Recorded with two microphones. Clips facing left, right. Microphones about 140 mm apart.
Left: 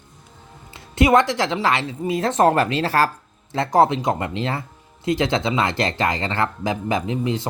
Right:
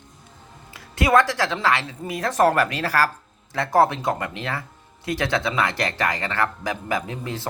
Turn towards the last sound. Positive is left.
turn(degrees=20)  # may be behind; listen again after turning